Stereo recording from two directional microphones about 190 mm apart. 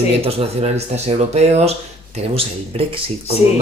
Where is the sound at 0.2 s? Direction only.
30° right (ahead or behind).